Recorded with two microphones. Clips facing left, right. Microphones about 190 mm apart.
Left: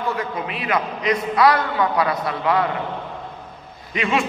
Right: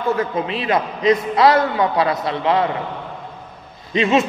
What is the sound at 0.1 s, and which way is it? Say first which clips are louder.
A man's voice: right 6 dB; 25° right (ahead or behind).